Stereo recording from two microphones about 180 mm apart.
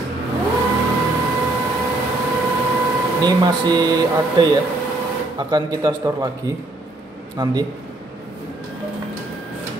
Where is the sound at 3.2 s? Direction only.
20° right (ahead or behind).